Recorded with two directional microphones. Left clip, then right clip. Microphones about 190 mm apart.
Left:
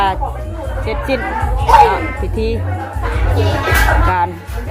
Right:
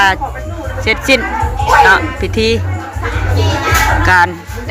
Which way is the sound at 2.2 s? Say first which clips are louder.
Right 6 dB; 10° right (ahead or behind).